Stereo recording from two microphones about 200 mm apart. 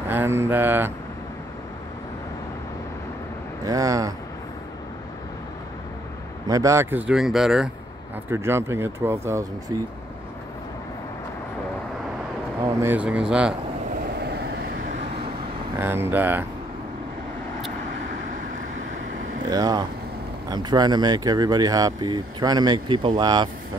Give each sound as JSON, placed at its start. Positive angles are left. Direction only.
{"t": 0.1, "sound": "speech", "side_deg": -10}
{"t": 3.6, "sound": "speech", "side_deg": -15}
{"t": 6.4, "sound": "speech", "side_deg": -15}
{"t": 8.3, "sound": "speech", "side_deg": -10}
{"t": 12.6, "sound": "speech", "side_deg": -10}
{"t": 14.2, "sound": "vehicle", "side_deg": -55}
{"t": 15.8, "sound": "speech", "side_deg": -10}
{"t": 19.5, "sound": "speech", "side_deg": -20}